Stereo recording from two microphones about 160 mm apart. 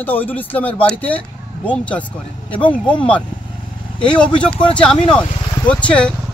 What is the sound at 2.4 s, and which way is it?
Speech, 30° left (ahead or behind).